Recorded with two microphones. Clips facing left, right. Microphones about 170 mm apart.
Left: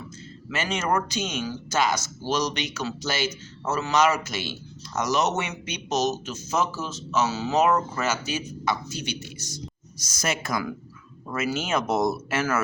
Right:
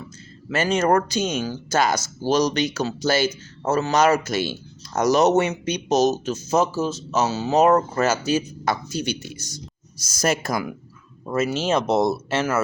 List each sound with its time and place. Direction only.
0.4 s speech: 40° right (ahead or behind)
7.6 s speech: 45° right (ahead or behind); by 12.6 s 25° right (ahead or behind)